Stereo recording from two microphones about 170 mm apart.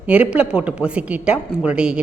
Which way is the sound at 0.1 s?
5° right (ahead or behind).